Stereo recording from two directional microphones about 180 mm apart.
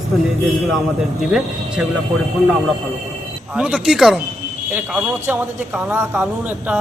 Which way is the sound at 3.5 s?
5° right (ahead or behind).